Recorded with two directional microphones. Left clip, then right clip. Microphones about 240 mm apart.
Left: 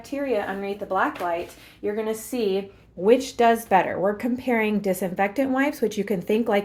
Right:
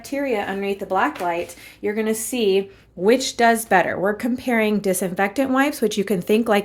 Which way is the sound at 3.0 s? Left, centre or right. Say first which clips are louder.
Right 2 dB; right.